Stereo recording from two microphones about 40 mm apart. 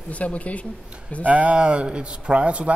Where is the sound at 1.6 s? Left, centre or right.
Right.